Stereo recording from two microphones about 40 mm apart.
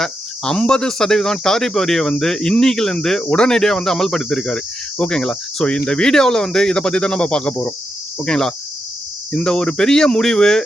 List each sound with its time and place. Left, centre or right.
0.0 s cricket: left
0.9 s speech: centre
3.2 s speech: left